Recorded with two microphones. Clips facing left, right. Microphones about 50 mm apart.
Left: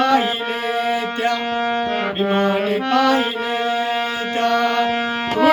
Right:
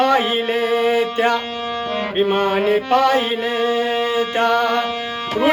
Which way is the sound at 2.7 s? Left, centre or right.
Right.